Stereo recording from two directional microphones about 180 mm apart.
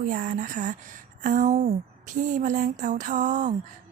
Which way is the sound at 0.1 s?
45° right (ahead or behind).